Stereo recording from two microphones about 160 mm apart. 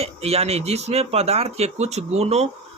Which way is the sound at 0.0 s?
40° right (ahead or behind).